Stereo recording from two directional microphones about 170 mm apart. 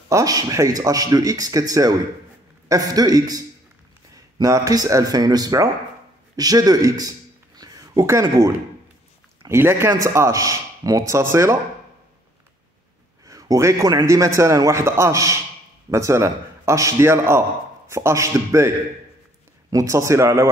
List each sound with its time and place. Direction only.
0.1 s a man's voice: 20° right (ahead or behind)
13.2 s a man's voice: 20° right (ahead or behind)
19.7 s a man's voice: 20° right (ahead or behind)